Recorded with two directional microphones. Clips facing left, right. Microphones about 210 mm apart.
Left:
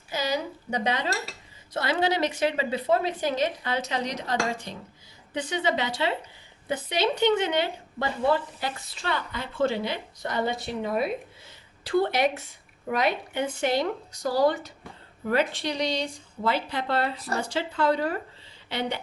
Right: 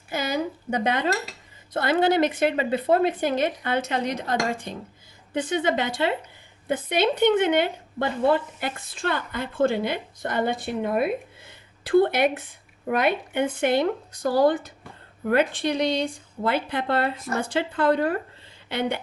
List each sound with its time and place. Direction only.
0.1 s a woman's voice: 55° right (ahead or behind)